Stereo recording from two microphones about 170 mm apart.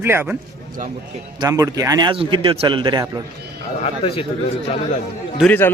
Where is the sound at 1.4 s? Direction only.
20° right (ahead or behind).